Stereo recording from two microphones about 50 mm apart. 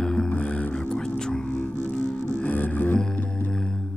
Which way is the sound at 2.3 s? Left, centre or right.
Left.